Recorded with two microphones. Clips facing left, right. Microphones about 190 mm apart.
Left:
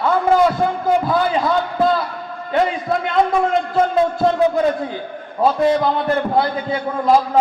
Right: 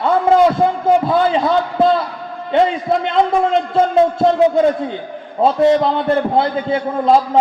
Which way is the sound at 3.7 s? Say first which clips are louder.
Right 4 dB; 25° right (ahead or behind).